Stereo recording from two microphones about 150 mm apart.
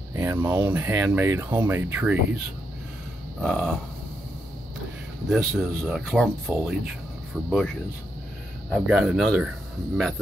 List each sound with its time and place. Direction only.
0.1 s a sound: 15° right (ahead or behind)
0.7 s speech: 15° right (ahead or behind)
3.3 s speech: centre (ahead or behind)
5.3 s speech: centre (ahead or behind)
8.7 s speech: 5° right (ahead or behind)